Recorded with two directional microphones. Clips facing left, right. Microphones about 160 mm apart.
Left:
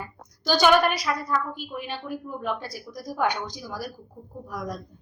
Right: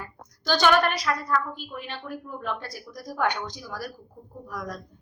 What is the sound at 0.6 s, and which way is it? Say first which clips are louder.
A woman's voice: left 2 dB; 10° left (ahead or behind).